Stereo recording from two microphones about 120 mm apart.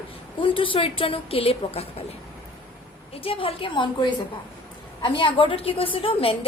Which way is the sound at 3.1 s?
50° left (ahead or behind).